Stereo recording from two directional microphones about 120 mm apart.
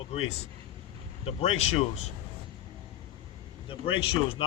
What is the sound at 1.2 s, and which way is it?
Speech, 55° left (ahead or behind).